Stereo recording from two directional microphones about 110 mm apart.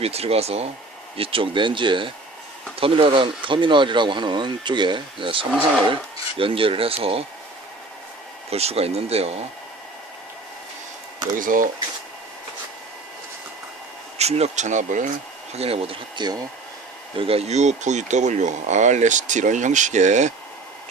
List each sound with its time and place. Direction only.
0.0 s speech: 65° right (ahead or behind)
1.1 s speech: 55° right (ahead or behind)
8.4 s speech: 70° right (ahead or behind)
14.2 s speech: 75° right (ahead or behind); by 14.8 s 90° right
15.5 s speech: 65° right (ahead or behind)
16.1 s speech: 40° right (ahead or behind)
17.2 s speech: 65° right (ahead or behind); by 20.3 s 90° right